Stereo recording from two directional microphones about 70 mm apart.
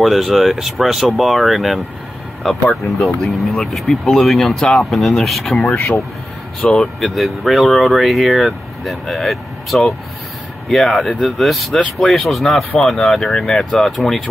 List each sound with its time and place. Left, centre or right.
0.0 s speech: centre
3.0 s speech: centre
5.6 s speech: centre
6.7 s speech: centre